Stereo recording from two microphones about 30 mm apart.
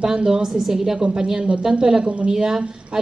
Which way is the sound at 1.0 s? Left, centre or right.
Right.